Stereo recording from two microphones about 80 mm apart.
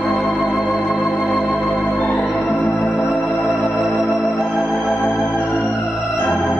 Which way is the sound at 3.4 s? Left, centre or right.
Centre.